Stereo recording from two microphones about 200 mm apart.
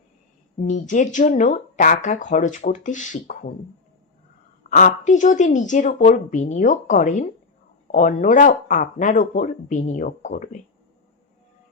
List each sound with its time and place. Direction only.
0.6 s speech: 40° left (ahead or behind)
4.7 s speech: 40° left (ahead or behind)